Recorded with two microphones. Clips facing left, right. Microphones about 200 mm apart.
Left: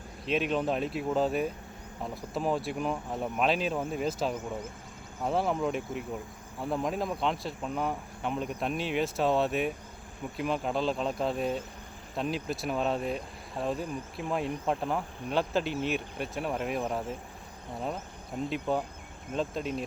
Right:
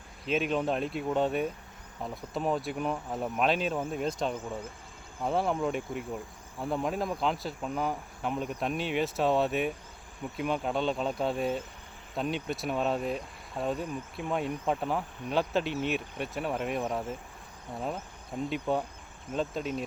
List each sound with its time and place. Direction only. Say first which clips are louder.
0.3 s speech: even; centre (ahead or behind)